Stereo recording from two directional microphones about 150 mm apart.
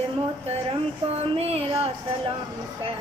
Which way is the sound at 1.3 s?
40° right (ahead or behind).